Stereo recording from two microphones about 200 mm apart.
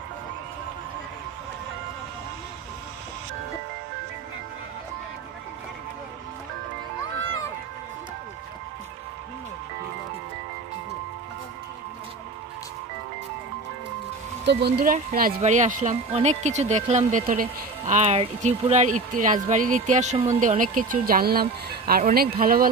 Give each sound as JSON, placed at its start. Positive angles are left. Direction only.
{"t": 14.4, "sound": "speech", "side_deg": -55}
{"t": 14.9, "sound": "speech", "side_deg": -40}